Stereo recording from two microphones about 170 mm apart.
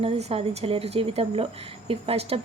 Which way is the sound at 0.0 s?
35° right (ahead or behind).